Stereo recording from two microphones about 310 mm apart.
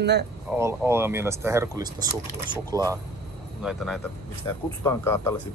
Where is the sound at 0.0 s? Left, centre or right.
Right.